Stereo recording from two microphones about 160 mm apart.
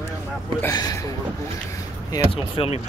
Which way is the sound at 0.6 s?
20° left (ahead or behind).